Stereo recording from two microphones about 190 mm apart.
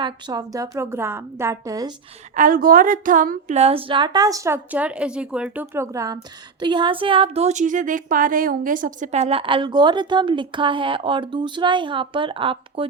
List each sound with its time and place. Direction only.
0.0 s a woman's voice: 20° right (ahead or behind)
2.3 s speech: 45° right (ahead or behind); by 12.9 s 30° right (ahead or behind)